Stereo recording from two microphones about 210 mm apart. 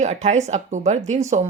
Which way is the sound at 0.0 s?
35° right (ahead or behind).